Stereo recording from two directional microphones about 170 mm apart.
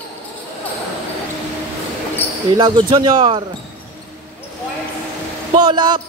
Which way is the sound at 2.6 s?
25° right (ahead or behind).